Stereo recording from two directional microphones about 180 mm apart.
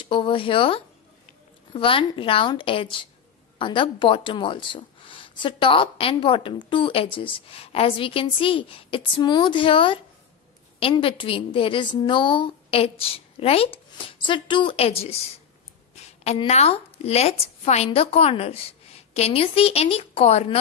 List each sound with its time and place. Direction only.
0.0 s a woman's voice: 30° left (ahead or behind)